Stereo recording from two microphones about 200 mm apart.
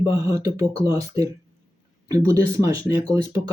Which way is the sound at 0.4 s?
15° right (ahead or behind).